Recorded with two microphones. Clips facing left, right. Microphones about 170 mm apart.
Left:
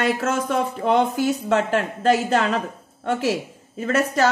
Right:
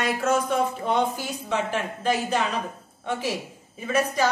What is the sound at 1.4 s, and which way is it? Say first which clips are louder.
Speech: left 6 dB; 70° left (ahead or behind).